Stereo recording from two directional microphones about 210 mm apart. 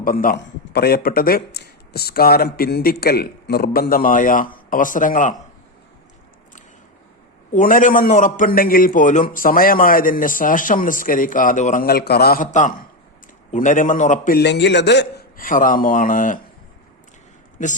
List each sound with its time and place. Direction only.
0.0 s speech: 40° left (ahead or behind)
7.5 s a man's voice: 40° left (ahead or behind)